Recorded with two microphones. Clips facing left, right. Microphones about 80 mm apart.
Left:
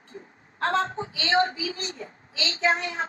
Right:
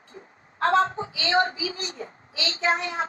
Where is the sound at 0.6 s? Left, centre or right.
Right.